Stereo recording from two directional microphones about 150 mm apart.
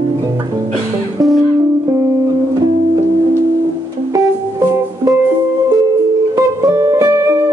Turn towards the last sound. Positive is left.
turn(degrees=-20)  # may be behind; listen again after turning